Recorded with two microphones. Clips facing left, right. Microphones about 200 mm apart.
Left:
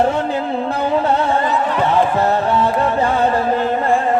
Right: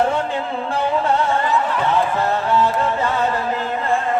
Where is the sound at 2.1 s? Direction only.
35° left (ahead or behind).